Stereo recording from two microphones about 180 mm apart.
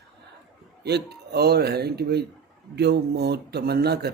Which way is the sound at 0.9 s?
65° right (ahead or behind).